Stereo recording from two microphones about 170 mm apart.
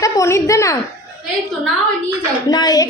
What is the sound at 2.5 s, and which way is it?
Speech, 25° left (ahead or behind).